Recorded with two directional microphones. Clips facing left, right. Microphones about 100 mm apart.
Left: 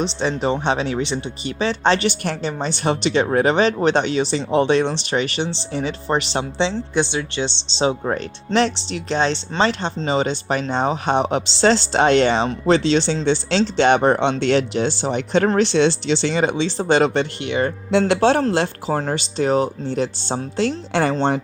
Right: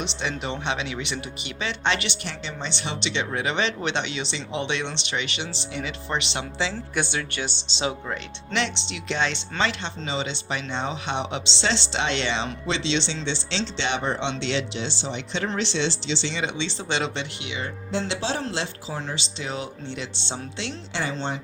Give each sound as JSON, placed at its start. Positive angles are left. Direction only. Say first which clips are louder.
{"t": 0.0, "sound": "speech", "louder": "left 9 dB", "side_deg": 35}